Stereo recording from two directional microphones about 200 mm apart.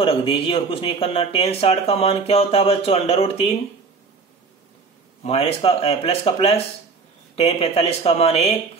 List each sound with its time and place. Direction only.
0.0 s speech: 25° left (ahead or behind)
5.2 s speech: 30° left (ahead or behind)